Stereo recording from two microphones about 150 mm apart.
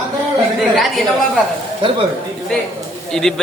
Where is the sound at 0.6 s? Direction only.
Centre (ahead or behind).